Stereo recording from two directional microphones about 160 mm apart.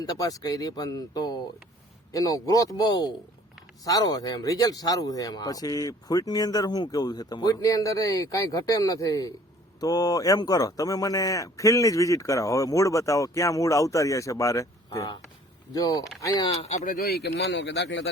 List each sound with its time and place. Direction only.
0.0 s speech: 25° left (ahead or behind)
16.6 s speech: 45° left (ahead or behind)
17.0 s speech: 85° left